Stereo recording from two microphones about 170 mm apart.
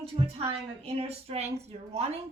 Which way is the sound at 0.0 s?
35° right (ahead or behind).